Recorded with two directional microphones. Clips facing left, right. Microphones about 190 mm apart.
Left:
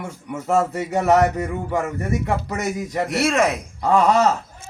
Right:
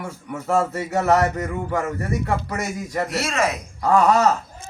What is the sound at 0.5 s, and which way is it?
Speech, 20° left (ahead or behind).